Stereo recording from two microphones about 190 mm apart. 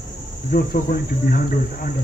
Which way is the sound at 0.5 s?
50° left (ahead or behind).